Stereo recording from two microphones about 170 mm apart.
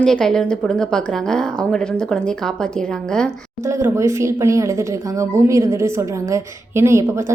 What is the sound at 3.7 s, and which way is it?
A woman's voice, 15° right (ahead or behind).